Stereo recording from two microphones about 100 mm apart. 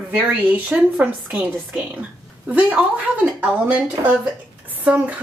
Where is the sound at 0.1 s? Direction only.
15° right (ahead or behind).